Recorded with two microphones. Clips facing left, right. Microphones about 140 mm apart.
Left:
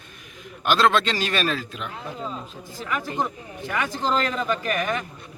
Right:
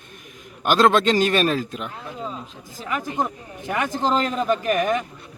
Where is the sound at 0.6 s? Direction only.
45° right (ahead or behind).